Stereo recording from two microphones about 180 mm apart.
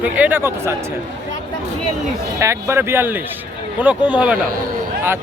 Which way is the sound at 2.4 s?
15° right (ahead or behind).